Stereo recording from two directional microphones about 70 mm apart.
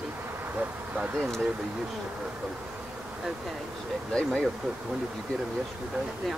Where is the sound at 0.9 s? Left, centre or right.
Centre.